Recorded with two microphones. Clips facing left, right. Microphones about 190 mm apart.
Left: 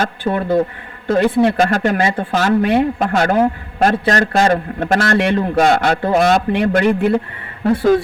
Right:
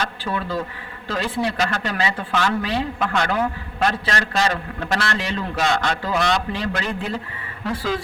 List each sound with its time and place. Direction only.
0.0 s a man's voice: 50° left (ahead or behind)
5.1 s a man's voice: 60° left (ahead or behind)